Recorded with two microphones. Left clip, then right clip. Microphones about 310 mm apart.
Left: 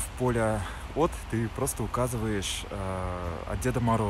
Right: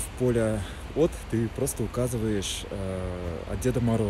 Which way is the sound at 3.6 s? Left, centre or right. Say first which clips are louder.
Even; centre.